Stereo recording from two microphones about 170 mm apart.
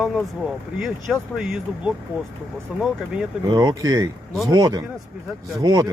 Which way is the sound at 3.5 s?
25° right (ahead or behind).